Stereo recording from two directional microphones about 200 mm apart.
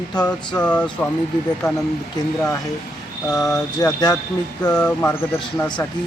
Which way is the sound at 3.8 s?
20° left (ahead or behind).